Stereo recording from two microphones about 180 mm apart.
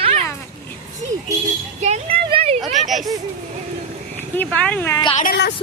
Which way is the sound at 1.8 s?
35° right (ahead or behind).